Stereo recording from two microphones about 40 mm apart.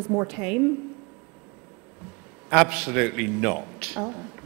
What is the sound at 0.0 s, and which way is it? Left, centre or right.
Speech, centre.